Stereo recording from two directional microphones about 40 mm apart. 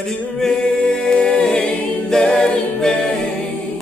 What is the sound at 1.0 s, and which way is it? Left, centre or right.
A capella, centre.